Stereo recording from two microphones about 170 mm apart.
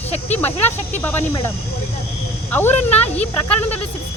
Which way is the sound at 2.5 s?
10° left (ahead or behind).